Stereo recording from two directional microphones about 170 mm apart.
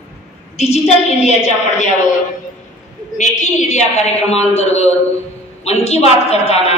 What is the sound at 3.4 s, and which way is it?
A man's voice, 45° left (ahead or behind).